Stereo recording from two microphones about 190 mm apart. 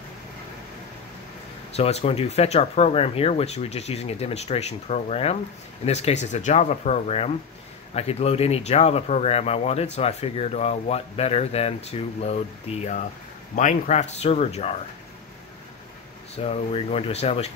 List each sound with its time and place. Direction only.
1.8 s speech: 35° left (ahead or behind)
16.3 s speech: 30° left (ahead or behind)